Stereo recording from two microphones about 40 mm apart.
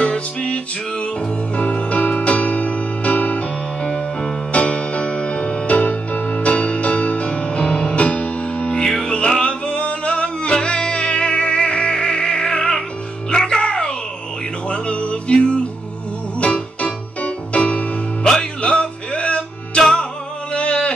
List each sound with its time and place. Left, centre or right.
0.0 s music: left
1.6 s music: left
4.5 s music: left
16.8 s music: left
18.2 s music: centre
18.6 s music: left
20.5 s a sound: left